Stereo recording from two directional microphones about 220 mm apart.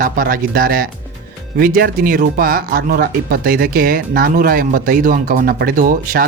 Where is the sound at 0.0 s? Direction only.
40° right (ahead or behind).